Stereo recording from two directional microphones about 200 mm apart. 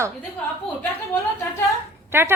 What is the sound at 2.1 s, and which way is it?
Dog, 10° right (ahead or behind).